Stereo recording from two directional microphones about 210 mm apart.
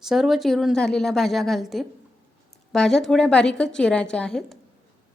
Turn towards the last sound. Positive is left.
turn(degrees=5)  # may be behind; listen again after turning